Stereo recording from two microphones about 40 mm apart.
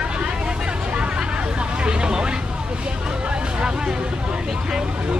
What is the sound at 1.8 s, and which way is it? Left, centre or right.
Vehicle, right.